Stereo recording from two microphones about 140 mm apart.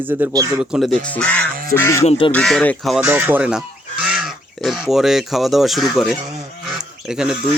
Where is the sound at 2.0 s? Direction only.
40° left (ahead or behind).